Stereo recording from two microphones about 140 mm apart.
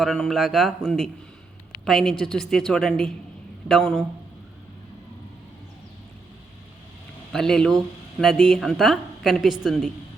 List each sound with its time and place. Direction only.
0.0 s a woman's voice: centre (ahead or behind)
7.3 s a woman's voice: 5° left (ahead or behind)